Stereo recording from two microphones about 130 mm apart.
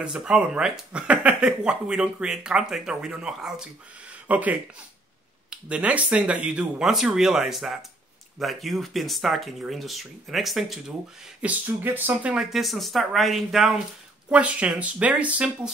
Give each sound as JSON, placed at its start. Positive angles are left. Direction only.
{"t": 0.0, "sound": "speech", "side_deg": -5}
{"t": 4.1, "sound": "a sound", "side_deg": -10}
{"t": 5.5, "sound": "speech", "side_deg": -10}
{"t": 11.4, "sound": "speech", "side_deg": -15}